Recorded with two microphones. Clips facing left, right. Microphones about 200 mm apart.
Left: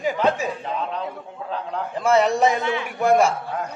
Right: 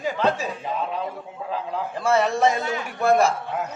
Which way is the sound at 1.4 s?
5° right (ahead or behind).